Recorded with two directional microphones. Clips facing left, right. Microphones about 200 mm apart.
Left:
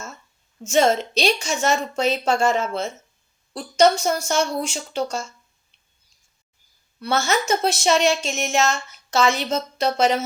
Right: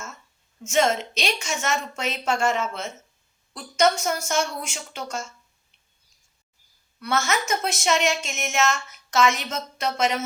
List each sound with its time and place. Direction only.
0.6 s speech: 35° left (ahead or behind)
7.0 s speech: 30° left (ahead or behind)